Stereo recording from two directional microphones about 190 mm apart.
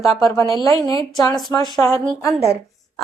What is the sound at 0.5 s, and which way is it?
A woman's voice, 15° left (ahead or behind).